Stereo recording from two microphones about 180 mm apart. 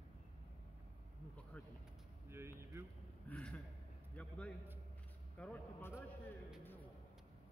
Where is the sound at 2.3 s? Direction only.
15° right (ahead or behind).